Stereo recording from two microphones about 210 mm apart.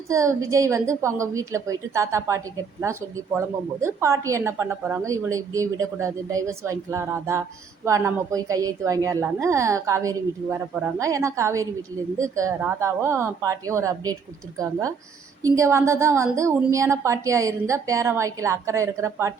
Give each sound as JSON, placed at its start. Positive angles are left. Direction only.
{"t": 0.1, "sound": "a woman's voice", "side_deg": -15}